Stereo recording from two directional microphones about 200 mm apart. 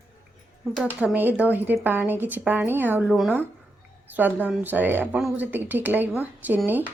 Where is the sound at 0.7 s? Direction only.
Centre (ahead or behind).